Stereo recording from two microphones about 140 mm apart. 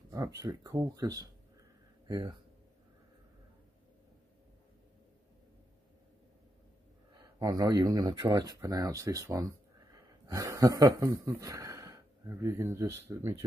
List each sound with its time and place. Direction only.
0.1 s speech: 25° right (ahead or behind)
7.3 s speech: 30° right (ahead or behind)